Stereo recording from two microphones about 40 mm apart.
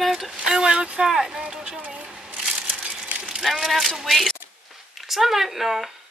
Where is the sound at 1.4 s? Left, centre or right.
Right.